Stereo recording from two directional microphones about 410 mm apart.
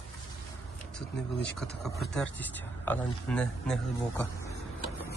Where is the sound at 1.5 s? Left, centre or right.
Centre.